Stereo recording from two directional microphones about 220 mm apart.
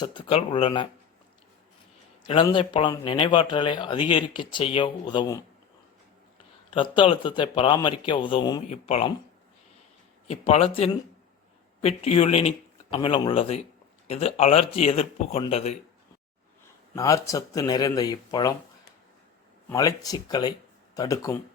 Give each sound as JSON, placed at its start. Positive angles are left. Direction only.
{"t": 0.0, "sound": "speech", "side_deg": 25}
{"t": 2.2, "sound": "speech", "side_deg": 20}
{"t": 6.7, "sound": "speech", "side_deg": 25}
{"t": 10.2, "sound": "speech", "side_deg": 30}
{"t": 16.9, "sound": "speech", "side_deg": 15}
{"t": 19.7, "sound": "speech", "side_deg": 15}